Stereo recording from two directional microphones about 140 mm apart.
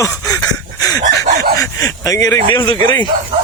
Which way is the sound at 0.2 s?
25° left (ahead or behind).